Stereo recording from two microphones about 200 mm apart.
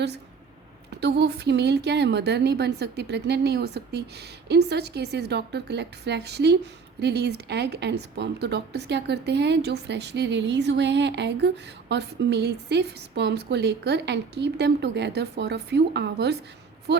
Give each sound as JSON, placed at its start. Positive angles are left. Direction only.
{"t": 0.9, "sound": "a woman's voice", "side_deg": -55}